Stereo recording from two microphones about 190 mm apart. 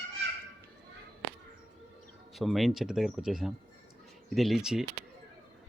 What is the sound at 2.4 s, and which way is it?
Speech, centre (ahead or behind).